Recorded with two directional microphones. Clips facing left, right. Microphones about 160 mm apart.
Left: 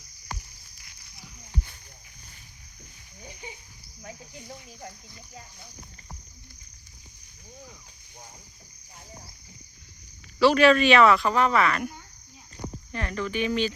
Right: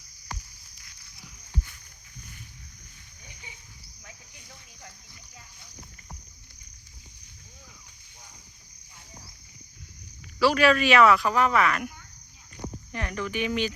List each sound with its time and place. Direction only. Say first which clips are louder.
4.0 s cricket: left 11 dB; 30° left (ahead or behind)
10.4 s speech: left 3 dB; 5° right (ahead or behind)
12.9 s speech: left 2 dB; 15° right (ahead or behind)